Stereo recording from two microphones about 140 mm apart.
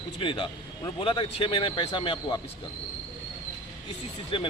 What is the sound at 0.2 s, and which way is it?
Speech, 35° left (ahead or behind).